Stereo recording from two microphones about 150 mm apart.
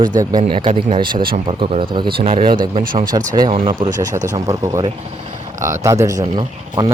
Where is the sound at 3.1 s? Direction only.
25° right (ahead or behind).